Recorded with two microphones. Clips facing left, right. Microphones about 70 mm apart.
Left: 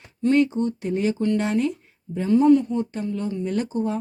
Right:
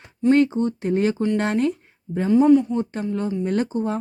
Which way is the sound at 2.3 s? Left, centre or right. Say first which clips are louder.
Right 1 dB; centre.